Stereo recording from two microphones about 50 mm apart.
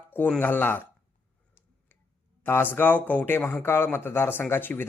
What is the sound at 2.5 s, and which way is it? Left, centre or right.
Speech, left.